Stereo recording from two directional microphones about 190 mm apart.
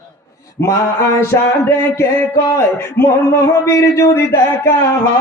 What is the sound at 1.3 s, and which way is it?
A man's voice, 15° left (ahead or behind).